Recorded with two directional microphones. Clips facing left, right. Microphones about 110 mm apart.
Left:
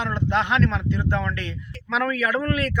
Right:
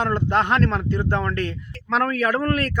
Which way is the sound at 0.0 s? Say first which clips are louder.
Right 3 dB; 45° right (ahead or behind).